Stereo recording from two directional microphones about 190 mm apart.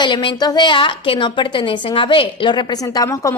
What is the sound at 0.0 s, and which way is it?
A woman's voice, 25° left (ahead or behind).